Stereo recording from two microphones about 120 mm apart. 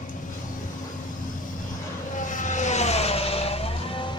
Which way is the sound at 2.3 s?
85° left.